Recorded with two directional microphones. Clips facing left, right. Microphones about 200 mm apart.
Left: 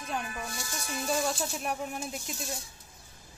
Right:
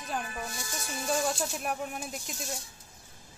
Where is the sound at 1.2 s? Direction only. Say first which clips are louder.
Even; centre (ahead or behind).